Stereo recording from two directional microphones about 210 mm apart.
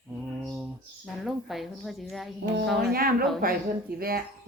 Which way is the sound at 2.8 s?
45° right (ahead or behind).